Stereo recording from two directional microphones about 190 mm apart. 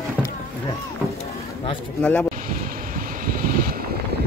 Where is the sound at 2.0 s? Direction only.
5° left (ahead or behind).